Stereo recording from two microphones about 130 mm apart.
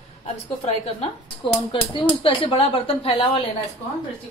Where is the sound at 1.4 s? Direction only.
40° left (ahead or behind).